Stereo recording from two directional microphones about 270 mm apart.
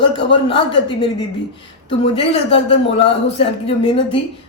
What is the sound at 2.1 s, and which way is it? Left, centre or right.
A woman's voice, left.